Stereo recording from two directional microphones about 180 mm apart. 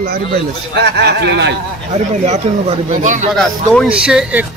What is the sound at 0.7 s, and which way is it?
Speech, 65° right (ahead or behind).